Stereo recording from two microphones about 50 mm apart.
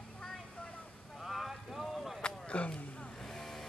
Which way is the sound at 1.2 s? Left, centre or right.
Centre.